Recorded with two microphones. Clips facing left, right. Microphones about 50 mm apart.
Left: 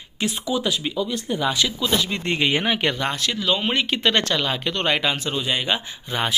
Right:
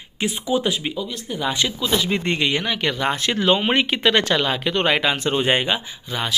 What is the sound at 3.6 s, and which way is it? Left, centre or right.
Speech, centre.